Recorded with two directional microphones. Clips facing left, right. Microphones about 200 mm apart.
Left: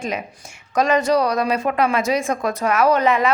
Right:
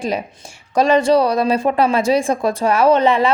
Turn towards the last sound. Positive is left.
turn(degrees=-30)  # may be behind; listen again after turning